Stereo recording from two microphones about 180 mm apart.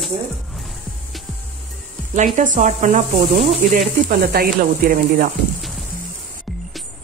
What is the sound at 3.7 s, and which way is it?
Speech, 55° right (ahead or behind).